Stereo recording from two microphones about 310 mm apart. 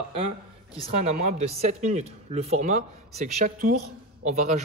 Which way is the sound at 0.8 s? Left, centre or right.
Right.